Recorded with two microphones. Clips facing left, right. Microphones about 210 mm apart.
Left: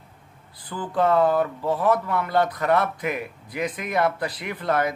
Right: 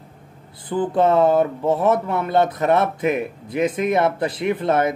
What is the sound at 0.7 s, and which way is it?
Speech, 25° right (ahead or behind).